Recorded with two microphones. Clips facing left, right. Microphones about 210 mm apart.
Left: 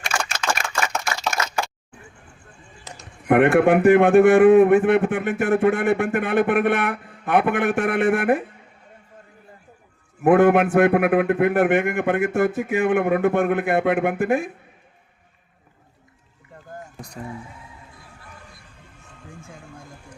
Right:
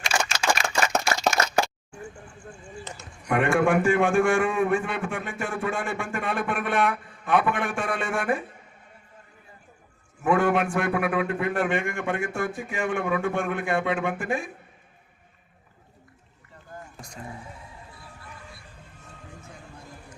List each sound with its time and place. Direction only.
0.9 s a sound: 40° right (ahead or behind)
3.2 s a man's voice: 60° left (ahead or behind)
10.2 s a man's voice: 55° left (ahead or behind)
16.6 s vehicle: 55° left (ahead or behind)
19.4 s music: 50° left (ahead or behind)